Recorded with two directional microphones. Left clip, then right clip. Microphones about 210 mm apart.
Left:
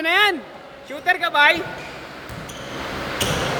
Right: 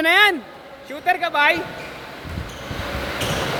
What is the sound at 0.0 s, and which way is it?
Speech, 25° right (ahead or behind).